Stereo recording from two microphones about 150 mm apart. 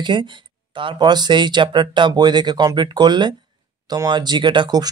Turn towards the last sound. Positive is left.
turn(degrees=-30)  # may be behind; listen again after turning